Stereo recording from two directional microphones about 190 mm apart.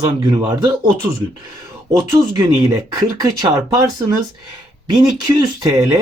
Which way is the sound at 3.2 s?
20° right (ahead or behind).